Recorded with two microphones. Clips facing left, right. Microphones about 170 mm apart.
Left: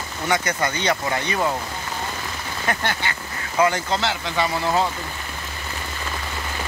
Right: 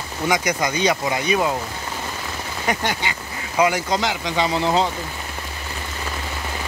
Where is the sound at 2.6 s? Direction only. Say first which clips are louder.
Right 2 dB; 15° right (ahead or behind).